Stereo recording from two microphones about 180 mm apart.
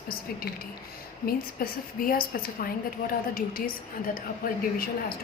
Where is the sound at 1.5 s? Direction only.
50° left (ahead or behind).